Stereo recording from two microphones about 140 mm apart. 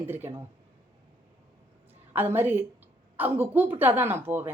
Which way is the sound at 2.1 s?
15° right (ahead or behind).